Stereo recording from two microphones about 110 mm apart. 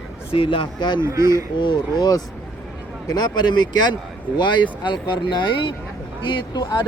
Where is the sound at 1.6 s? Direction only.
45° left (ahead or behind).